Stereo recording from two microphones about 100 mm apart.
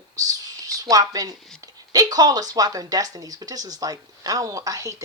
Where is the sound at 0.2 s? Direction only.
35° right (ahead or behind).